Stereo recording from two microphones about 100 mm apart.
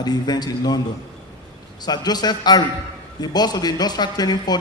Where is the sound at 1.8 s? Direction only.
45° left (ahead or behind).